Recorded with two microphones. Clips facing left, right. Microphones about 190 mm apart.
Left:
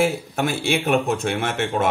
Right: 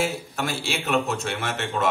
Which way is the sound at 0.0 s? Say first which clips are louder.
Left 6 dB; 55° left (ahead or behind).